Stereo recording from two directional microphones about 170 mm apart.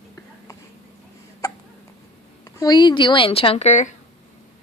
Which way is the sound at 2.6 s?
25° left (ahead or behind).